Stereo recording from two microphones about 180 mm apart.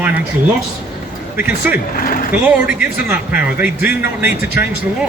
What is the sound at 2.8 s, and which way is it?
Speech, 10° right (ahead or behind).